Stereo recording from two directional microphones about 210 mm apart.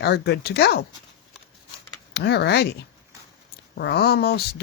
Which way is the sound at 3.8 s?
50° left (ahead or behind).